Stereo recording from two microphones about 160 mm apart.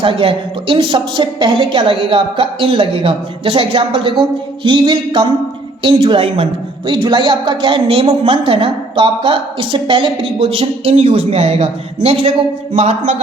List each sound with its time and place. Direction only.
0.0 s a woman's voice: 35° right (ahead or behind)
12.7 s speech: 45° right (ahead or behind)